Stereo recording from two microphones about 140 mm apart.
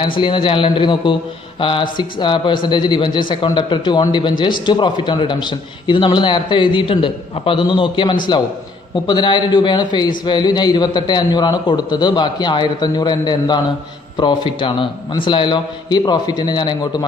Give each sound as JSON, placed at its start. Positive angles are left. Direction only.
{"t": 0.2, "sound": "a man's voice", "side_deg": 40}